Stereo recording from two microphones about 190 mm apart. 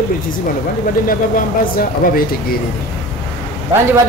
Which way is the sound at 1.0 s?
50° left (ahead or behind).